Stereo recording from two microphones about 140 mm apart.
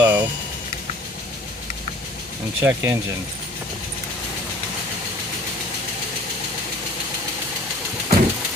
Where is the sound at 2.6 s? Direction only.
15° right (ahead or behind).